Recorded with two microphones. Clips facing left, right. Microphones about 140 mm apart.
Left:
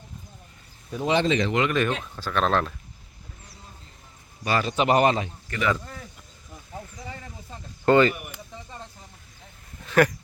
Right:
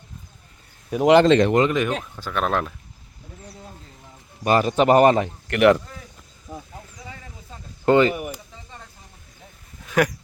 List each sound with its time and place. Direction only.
0.9 s speech: 80° right
1.4 s speech: 55° right (ahead or behind)
2.1 s speech: 15° right (ahead or behind)
4.4 s speech: 45° right (ahead or behind); by 5.8 s 65° right (ahead or behind)
7.9 s speech: 15° right (ahead or behind)
9.8 s a sound: 10° right (ahead or behind)